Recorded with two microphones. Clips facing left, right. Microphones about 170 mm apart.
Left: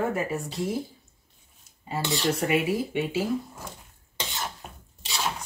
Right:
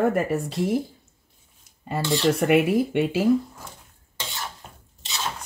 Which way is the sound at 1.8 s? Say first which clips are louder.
Right 5 dB; 60° right (ahead or behind).